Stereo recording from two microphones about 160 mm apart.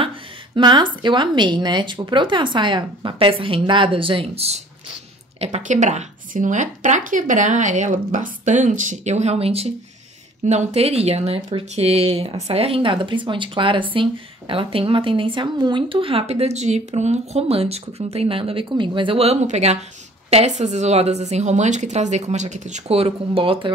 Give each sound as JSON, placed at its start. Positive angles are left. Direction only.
{"t": 0.6, "sound": "speech", "side_deg": -30}